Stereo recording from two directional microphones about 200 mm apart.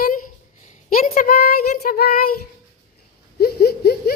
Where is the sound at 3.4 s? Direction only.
50° left (ahead or behind).